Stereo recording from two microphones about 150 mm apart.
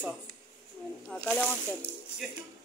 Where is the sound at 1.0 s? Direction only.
5° left (ahead or behind).